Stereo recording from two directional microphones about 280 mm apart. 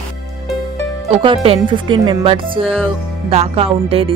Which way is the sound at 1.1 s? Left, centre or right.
Centre.